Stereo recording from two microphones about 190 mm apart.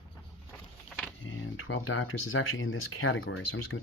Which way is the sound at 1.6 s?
90° left.